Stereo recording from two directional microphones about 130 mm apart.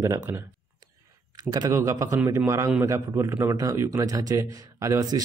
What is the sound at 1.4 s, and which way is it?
Speech, 30° right (ahead or behind).